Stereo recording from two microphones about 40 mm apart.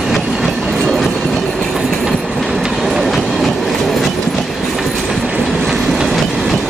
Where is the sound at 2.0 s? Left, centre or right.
Centre.